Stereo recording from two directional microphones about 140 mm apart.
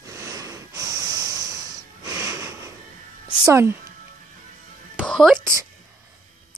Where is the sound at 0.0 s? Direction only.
25° right (ahead or behind).